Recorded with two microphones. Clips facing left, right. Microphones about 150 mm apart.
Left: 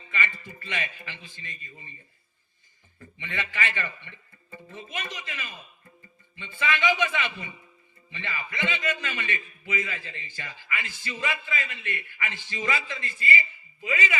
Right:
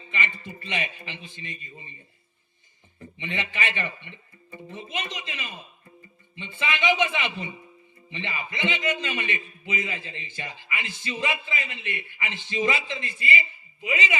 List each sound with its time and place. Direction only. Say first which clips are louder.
0.1 s a man's voice: right 1 dB; 20° right (ahead or behind)